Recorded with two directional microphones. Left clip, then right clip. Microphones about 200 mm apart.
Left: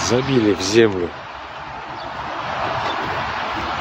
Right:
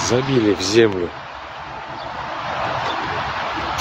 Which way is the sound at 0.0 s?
5° left (ahead or behind).